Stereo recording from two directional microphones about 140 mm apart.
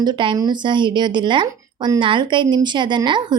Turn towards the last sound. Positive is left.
turn(degrees=-35)  # may be behind; listen again after turning